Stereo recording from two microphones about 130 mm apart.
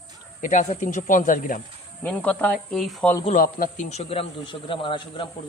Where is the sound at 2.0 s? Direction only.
10° left (ahead or behind).